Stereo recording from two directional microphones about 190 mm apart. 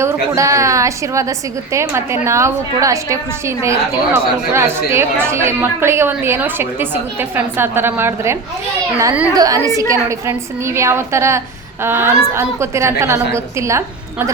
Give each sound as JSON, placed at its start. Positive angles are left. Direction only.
{"t": 0.0, "sound": "a woman's voice", "side_deg": -15}